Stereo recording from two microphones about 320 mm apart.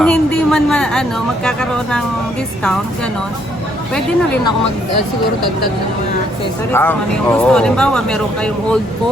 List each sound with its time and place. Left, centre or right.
0.0 s a sound: centre
1.5 s speech: centre
6.7 s speech: centre